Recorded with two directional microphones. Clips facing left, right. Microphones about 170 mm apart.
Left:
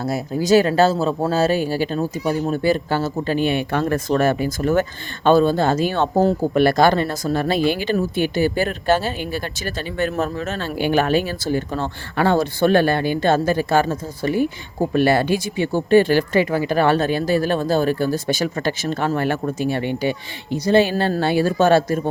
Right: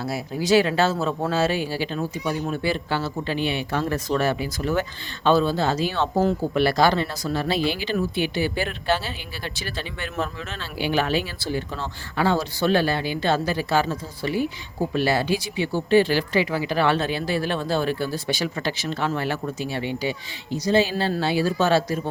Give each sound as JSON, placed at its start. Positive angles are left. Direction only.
{"t": 0.0, "sound": "speech", "side_deg": 45}
{"t": 20.9, "sound": "speech", "side_deg": 50}